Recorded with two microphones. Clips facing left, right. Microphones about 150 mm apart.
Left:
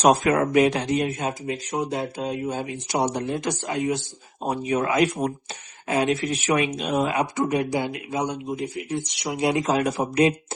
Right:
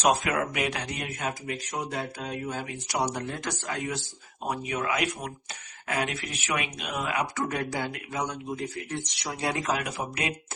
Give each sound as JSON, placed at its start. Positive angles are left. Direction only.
{"t": 0.0, "sound": "speech", "side_deg": 40}
{"t": 7.4, "sound": "speech", "side_deg": 15}